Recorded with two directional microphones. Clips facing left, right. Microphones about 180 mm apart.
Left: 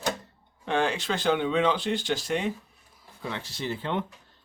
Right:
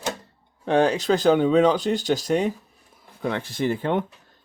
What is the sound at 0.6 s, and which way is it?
Speech, 40° right (ahead or behind).